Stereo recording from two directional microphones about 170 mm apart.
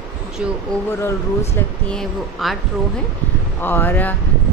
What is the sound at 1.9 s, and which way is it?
Speech, centre (ahead or behind).